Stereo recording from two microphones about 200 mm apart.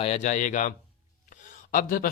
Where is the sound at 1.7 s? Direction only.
45° left (ahead or behind).